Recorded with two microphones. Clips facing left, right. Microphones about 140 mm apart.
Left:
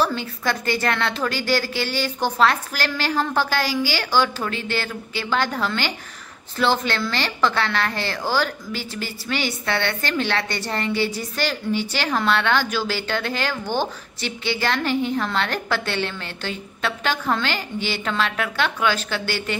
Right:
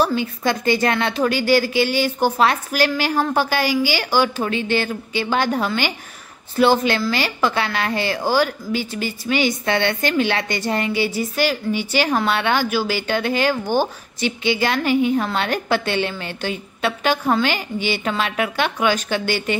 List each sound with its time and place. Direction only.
0.0 s a woman's voice: 15° right (ahead or behind)